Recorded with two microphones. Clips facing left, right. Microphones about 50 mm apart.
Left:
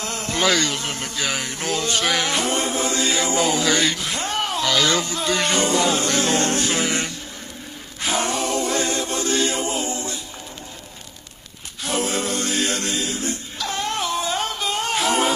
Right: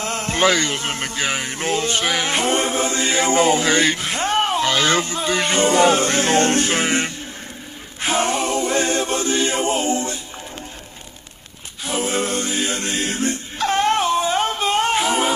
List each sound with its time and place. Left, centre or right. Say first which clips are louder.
0.0 s a sound: right 4 dB; right
0.5 s speech: right 2 dB; right
2.2 s mantra: right 3 dB; right
5.6 s speech: right 5 dB; right
8.0 s a capella: right 3 dB; right
9.3 s music: right 2 dB; right
12.0 s a capella: right 3 dB; right
12.4 s music: even; centre
12.8 s music: right 3 dB; right
15.0 s music: right 1 dB; centre